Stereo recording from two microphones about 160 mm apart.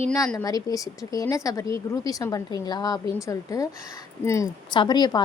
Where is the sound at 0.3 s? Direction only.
20° left (ahead or behind).